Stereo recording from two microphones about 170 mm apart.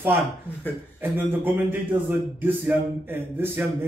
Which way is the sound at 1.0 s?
10° right (ahead or behind).